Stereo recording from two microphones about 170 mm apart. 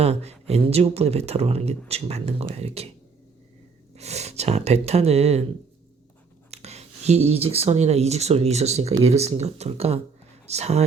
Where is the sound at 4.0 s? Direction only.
40° right (ahead or behind).